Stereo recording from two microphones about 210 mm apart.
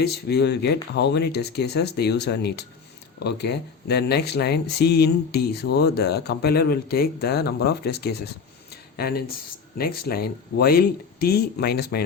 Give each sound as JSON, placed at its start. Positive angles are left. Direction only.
{"t": 0.0, "sound": "speech", "side_deg": 50}
{"t": 8.7, "sound": "a sound", "side_deg": 50}
{"t": 9.7, "sound": "speech", "side_deg": 45}